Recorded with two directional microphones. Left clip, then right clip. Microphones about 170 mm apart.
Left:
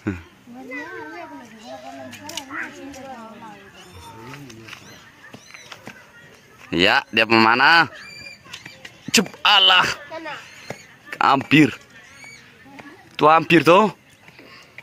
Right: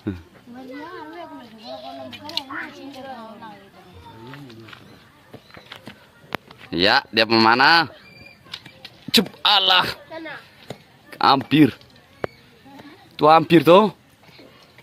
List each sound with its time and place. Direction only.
0.7 s a sound: 20° left (ahead or behind)
2.2 s a sound: centre (ahead or behind)
4.2 s wild animals: centre (ahead or behind)
6.7 s speech: 5° left (ahead or behind)
9.4 s speech: 5° right (ahead or behind)
11.1 s speech: 5° right (ahead or behind)
13.1 s a man's voice: 10° right (ahead or behind)